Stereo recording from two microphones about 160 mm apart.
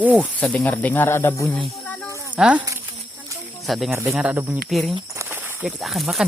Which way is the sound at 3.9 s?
15° right (ahead or behind).